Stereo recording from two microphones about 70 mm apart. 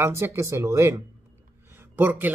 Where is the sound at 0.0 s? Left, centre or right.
Right.